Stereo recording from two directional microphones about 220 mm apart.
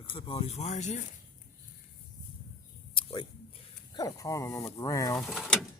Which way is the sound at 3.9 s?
15° left (ahead or behind).